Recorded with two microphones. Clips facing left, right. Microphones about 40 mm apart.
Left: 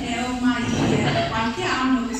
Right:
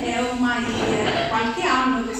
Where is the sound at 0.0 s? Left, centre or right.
Centre.